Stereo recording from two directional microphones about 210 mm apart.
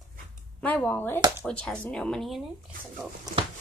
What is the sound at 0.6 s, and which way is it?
Speech, 5° left (ahead or behind).